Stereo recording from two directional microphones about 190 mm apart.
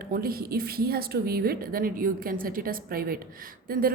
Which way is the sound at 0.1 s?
50° right (ahead or behind).